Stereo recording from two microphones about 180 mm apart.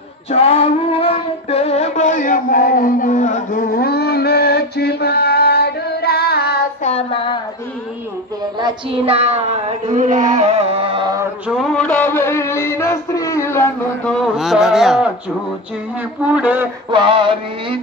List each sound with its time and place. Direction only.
0.3 s music: 35° left (ahead or behind); by 6.6 s 60° left (ahead or behind)
6.8 s child singing: 35° left (ahead or behind)
8.5 s child singing: 30° right (ahead or behind)
11.4 s music: centre (ahead or behind)
14.1 s a sound: centre (ahead or behind)
16.2 s speech: 10° right (ahead or behind)
16.9 s mantra: 25° right (ahead or behind)